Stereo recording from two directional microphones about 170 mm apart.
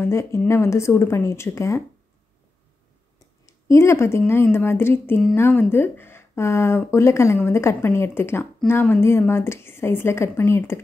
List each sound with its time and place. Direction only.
0.0 s a woman's voice: 15° left (ahead or behind)
3.4 s a woman's voice: 15° left (ahead or behind)